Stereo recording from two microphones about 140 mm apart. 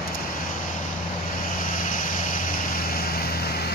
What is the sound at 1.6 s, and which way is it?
Vehicle, 70° left (ahead or behind).